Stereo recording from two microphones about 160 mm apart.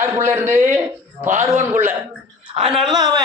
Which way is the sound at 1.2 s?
50° right (ahead or behind).